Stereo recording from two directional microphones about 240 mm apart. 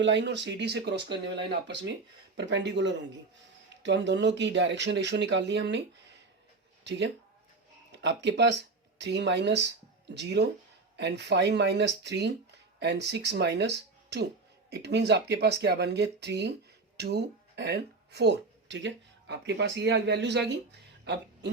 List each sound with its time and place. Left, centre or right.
0.0 s speech: right
7.9 s speech: right
21.0 s a sound: right